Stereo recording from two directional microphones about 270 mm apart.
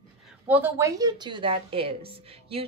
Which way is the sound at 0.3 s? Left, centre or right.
Centre.